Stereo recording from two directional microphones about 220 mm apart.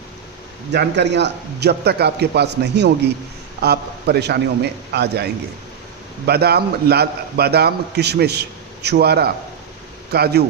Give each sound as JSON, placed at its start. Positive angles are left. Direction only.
{"t": 0.7, "sound": "a man's voice", "side_deg": -50}